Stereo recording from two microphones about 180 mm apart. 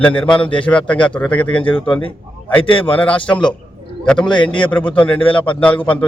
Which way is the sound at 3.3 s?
5° left (ahead or behind).